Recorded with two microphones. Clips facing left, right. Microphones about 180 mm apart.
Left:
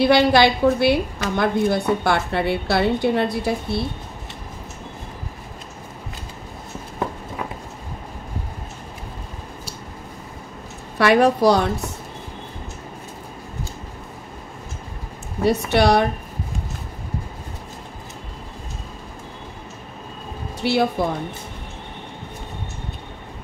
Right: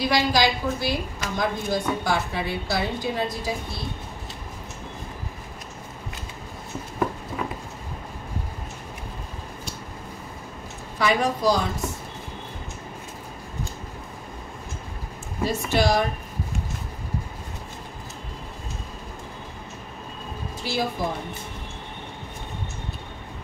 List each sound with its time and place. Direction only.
0.0 s a woman's voice: 65° left (ahead or behind)
11.0 s a woman's voice: 65° left (ahead or behind)
15.4 s speech: 65° left (ahead or behind)
20.6 s a woman's voice: 65° left (ahead or behind)